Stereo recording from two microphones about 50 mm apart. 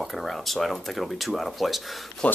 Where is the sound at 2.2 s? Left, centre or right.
Left.